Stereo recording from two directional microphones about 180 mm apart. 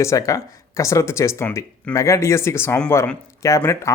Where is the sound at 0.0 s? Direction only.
15° left (ahead or behind).